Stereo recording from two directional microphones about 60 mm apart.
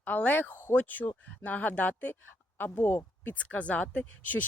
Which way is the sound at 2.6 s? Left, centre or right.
Left.